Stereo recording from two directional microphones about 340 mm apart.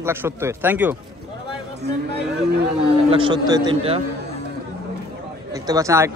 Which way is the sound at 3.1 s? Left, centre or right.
Centre.